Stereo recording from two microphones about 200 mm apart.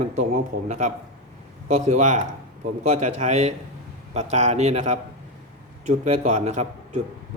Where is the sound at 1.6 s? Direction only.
40° right (ahead or behind).